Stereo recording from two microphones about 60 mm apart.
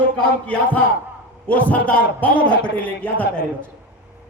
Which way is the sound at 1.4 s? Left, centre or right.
Left.